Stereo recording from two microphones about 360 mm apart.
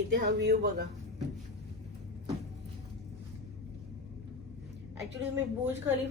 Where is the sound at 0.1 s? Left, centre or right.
Right.